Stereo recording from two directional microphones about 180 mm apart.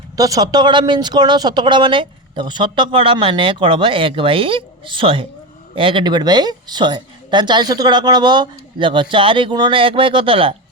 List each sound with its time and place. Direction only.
0.2 s speech: 20° right (ahead or behind)